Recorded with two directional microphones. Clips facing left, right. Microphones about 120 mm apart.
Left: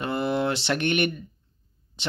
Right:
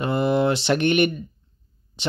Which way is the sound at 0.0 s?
15° right (ahead or behind).